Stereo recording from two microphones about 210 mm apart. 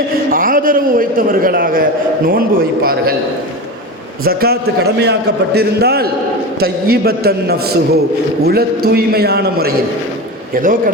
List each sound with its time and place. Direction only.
0.3 s a man's voice: 40° right (ahead or behind)
4.2 s a man's voice: 45° right (ahead or behind)